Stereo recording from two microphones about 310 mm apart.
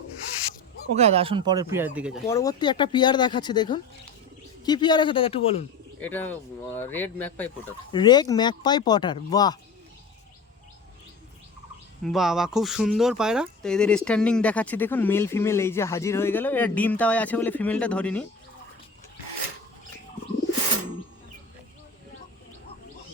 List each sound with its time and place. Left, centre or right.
0.9 s speech: centre
2.2 s speech: centre
6.0 s speech: centre
12.0 s speech: centre